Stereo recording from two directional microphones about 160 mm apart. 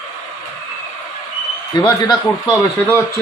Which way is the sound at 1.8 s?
25° left (ahead or behind).